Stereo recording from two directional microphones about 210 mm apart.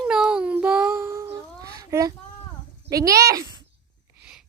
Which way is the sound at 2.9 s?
15° right (ahead or behind).